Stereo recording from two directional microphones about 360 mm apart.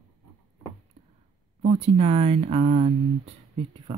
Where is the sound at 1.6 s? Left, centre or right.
Centre.